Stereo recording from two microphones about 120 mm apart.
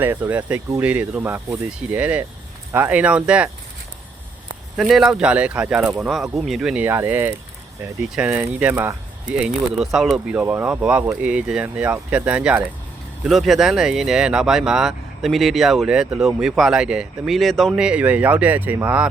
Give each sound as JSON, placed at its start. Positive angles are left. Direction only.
{"t": 0.0, "sound": "speech", "side_deg": -15}
{"t": 4.8, "sound": "speech", "side_deg": -5}
{"t": 6.8, "sound": "speech", "side_deg": -15}
{"t": 8.7, "sound": "speech", "side_deg": -25}
{"t": 9.4, "sound": "speech", "side_deg": -5}
{"t": 17.8, "sound": "speech", "side_deg": -10}